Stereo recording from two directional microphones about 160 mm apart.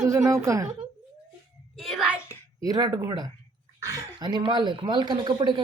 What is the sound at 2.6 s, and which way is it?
Speech, 20° right (ahead or behind).